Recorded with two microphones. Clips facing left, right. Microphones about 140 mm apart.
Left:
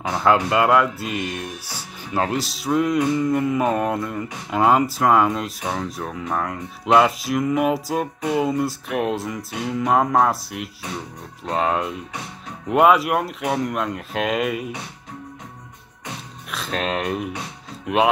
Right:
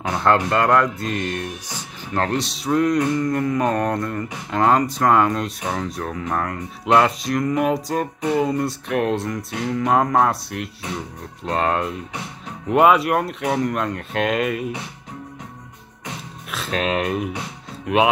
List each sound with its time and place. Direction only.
0.0 s speech: 5° left (ahead or behind)
16.4 s speech: centre (ahead or behind)